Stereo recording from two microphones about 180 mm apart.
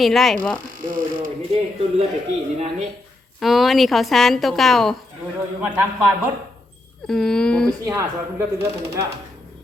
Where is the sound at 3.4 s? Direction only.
Centre (ahead or behind).